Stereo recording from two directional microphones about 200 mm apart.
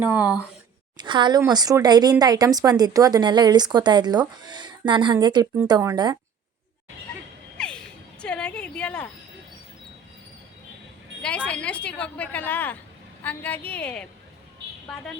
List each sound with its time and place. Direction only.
0.0 s speech: 10° right (ahead or behind)
0.9 s speech: 25° right (ahead or behind)
7.6 s a sound: 5° left (ahead or behind)
11.2 s speech: 5° left (ahead or behind)